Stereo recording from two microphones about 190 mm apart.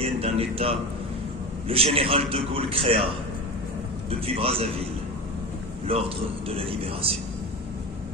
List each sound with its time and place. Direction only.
0.0 s a man's voice: 30° right (ahead or behind)
4.4 s a man's voice: 30° right (ahead or behind)
5.9 s a man's voice: 30° right (ahead or behind)